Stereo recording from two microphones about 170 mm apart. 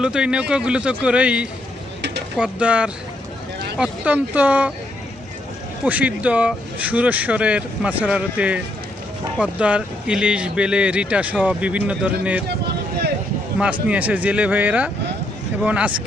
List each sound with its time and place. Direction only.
0.0 s speech: 5° right (ahead or behind)
2.0 s a sound: 90° right
2.3 s speech: 5° right (ahead or behind)
5.8 s speech: 10° right (ahead or behind)
13.8 s speech: 10° right (ahead or behind)